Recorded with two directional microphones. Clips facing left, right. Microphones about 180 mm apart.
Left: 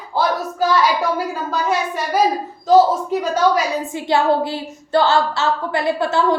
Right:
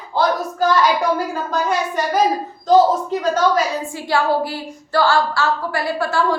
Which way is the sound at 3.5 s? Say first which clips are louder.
Even; 20° left (ahead or behind).